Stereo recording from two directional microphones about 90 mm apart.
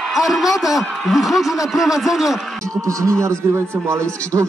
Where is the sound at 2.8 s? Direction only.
35° right (ahead or behind).